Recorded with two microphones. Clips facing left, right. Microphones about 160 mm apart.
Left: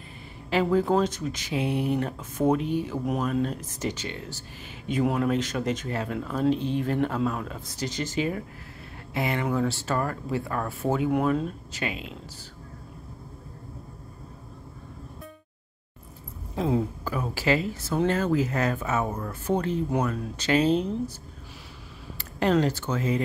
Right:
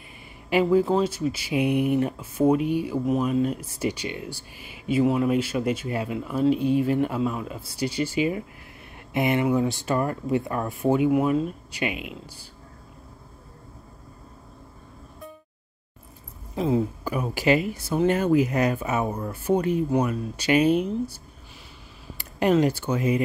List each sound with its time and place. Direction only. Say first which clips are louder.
0.5 s speech: right 3 dB; 10° right (ahead or behind)
11.1 s speech: right 3 dB; 5° right (ahead or behind)
16.5 s speech: right 2 dB; centre (ahead or behind)
17.0 s speech: right 3 dB; 15° right (ahead or behind)
22.2 s speech: right 3 dB; 15° right (ahead or behind)